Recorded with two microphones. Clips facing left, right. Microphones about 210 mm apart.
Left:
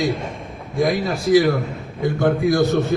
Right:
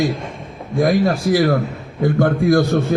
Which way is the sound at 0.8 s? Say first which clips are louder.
Right 4 dB; 50° right (ahead or behind).